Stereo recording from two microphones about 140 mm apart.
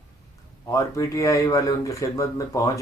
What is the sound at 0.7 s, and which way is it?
Speech, 20° left (ahead or behind).